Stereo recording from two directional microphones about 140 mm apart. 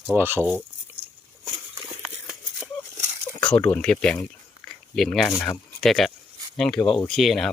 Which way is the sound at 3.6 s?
10° left (ahead or behind).